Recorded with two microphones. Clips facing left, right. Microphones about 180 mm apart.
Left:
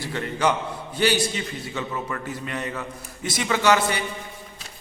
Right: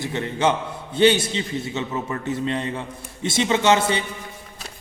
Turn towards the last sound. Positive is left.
turn(degrees=-25)  # may be behind; listen again after turning